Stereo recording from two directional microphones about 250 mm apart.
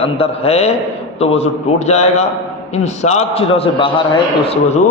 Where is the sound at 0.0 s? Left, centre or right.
Left.